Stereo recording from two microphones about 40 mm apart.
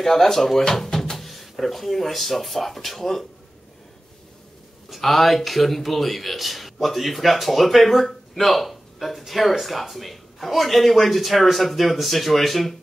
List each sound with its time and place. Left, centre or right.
0.0 s speech: centre
0.8 s music: centre
1.1 s speech: centre
4.8 s a man's voice: centre